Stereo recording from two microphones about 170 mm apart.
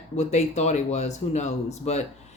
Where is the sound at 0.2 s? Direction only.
40° left (ahead or behind).